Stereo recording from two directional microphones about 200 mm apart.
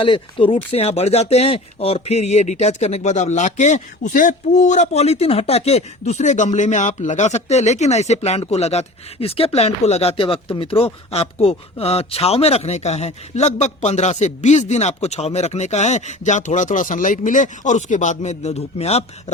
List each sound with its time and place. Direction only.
0.0 s speech: 25° left (ahead or behind)